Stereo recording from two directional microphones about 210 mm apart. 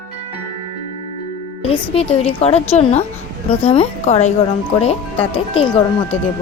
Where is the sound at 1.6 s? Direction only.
30° left (ahead or behind).